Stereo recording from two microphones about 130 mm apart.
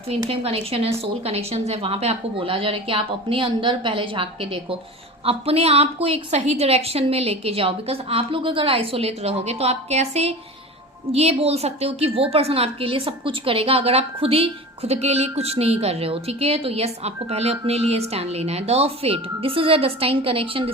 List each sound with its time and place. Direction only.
0.1 s a woman's voice: 50° right (ahead or behind)